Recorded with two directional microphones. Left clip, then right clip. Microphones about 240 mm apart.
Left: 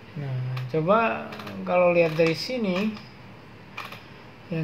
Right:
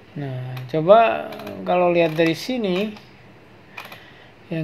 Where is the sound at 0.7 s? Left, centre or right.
Right.